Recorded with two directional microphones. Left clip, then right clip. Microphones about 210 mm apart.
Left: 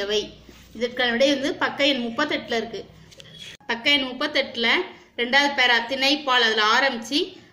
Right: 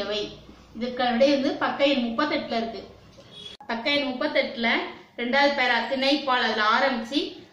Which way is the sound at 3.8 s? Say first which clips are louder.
Left 3 dB; 45° left (ahead or behind).